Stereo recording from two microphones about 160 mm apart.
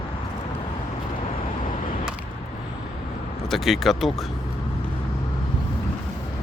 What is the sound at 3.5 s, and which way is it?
Speech, centre (ahead or behind).